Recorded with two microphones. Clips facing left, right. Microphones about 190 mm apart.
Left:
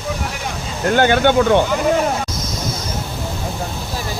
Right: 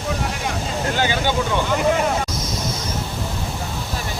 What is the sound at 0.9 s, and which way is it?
Speech, 55° left (ahead or behind).